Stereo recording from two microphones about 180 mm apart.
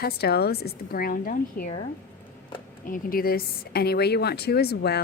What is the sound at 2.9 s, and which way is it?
A woman's voice, 55° left (ahead or behind).